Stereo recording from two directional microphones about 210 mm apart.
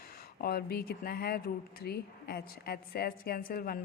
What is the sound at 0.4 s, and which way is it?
A woman's voice, 45° left (ahead or behind).